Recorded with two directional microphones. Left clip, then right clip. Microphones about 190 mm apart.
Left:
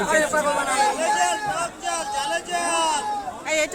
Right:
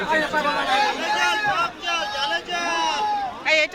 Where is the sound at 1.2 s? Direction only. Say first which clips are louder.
Right 2 dB; 90° left.